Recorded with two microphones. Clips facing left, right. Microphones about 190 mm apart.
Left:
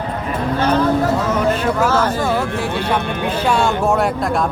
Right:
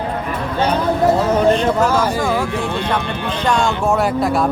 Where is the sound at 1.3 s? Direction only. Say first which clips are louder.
Right 3 dB; 30° right (ahead or behind).